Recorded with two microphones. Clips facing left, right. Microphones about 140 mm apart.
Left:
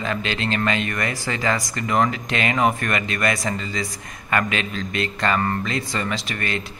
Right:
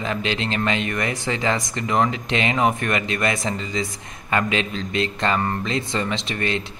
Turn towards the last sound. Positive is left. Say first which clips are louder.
# right 2 dB
turn(degrees=-25)  # may be behind; listen again after turning